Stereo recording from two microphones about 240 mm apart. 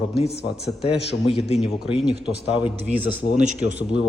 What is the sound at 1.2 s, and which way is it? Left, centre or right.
Speech, left.